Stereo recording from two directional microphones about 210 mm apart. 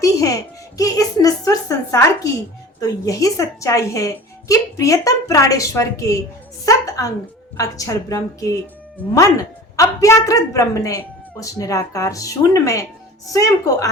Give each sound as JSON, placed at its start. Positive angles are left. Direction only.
{"t": 0.0, "sound": "a woman's voice", "side_deg": 15}
{"t": 9.7, "sound": "a woman's voice", "side_deg": 15}